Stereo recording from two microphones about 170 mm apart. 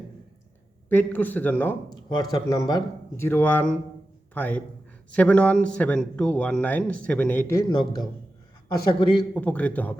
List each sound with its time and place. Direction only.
0.9 s speech: 10° left (ahead or behind)
1.9 s speech: 25° left (ahead or behind)
8.9 s speech: 30° left (ahead or behind)
9.3 s speech: 10° left (ahead or behind)